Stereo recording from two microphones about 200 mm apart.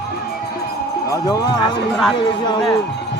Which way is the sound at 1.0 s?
15° left (ahead or behind).